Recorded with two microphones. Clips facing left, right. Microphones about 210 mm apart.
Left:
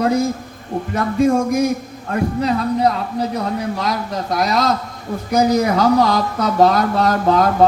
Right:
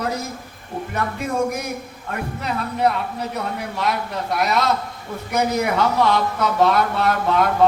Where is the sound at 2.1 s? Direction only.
35° left (ahead or behind).